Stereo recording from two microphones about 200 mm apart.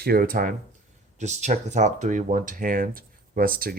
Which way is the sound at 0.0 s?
50° right (ahead or behind).